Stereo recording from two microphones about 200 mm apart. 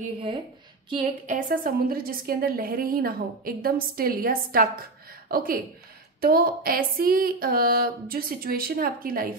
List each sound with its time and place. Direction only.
1.2 s a woman's voice: 40° right (ahead or behind)